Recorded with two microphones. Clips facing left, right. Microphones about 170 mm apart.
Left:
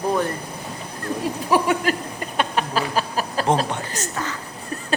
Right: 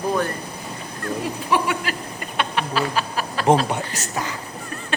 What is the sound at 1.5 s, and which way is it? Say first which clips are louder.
Speech: left 4 dB; 40° left (ahead or behind).